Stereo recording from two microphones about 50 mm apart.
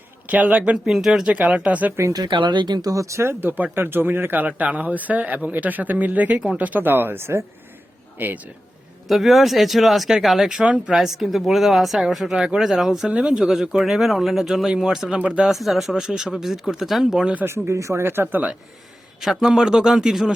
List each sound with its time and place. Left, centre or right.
0.3 s speech: right
0.9 s speech: centre
1.2 s speech: right
3.0 s speech: right
3.4 s a man's voice: right
9.0 s speech: centre
10.6 s speech: right
10.9 s speech: centre
13.1 s speech: centre
13.4 s speech: centre
17.4 s speech: right
19.2 s speech: centre